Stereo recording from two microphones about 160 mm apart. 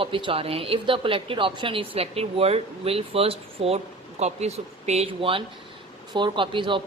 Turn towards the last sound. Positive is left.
turn(degrees=-30)  # may be behind; listen again after turning